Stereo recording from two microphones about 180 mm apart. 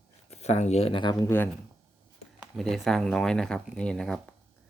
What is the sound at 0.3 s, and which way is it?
Speech, 35° left (ahead or behind).